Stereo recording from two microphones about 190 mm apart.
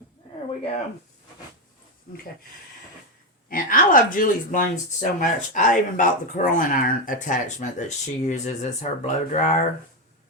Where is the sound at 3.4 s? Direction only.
45° left (ahead or behind).